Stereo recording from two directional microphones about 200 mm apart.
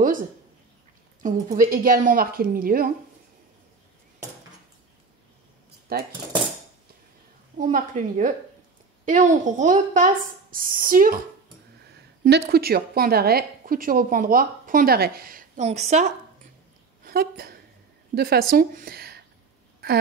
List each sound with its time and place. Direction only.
1.2 s a woman's voice: 45° right (ahead or behind)
5.9 s speech: 50° right (ahead or behind)
7.5 s speech: 40° right (ahead or behind)
12.3 s a woman's voice: 50° right (ahead or behind); by 16.1 s 35° right (ahead or behind)
17.0 s a woman's voice: 50° right (ahead or behind)